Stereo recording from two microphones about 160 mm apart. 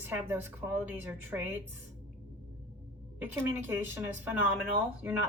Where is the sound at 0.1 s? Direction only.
15° right (ahead or behind).